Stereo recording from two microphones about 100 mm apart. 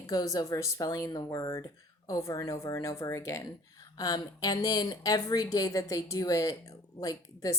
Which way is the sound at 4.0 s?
40° left (ahead or behind).